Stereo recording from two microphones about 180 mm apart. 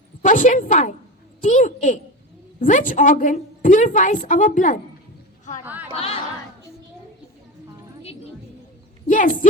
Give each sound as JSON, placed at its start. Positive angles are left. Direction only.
{"t": 0.2, "sound": "a woman's voice", "side_deg": 45}
{"t": 5.6, "sound": "speech", "side_deg": -10}
{"t": 9.0, "sound": "speech", "side_deg": 45}